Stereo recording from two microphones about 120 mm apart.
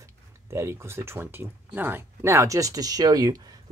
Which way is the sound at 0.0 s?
20° right (ahead or behind).